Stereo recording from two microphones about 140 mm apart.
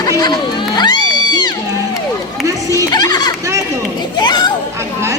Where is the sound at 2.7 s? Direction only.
25° left (ahead or behind).